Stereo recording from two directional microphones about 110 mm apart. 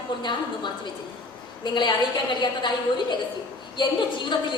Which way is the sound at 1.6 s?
45° left (ahead or behind).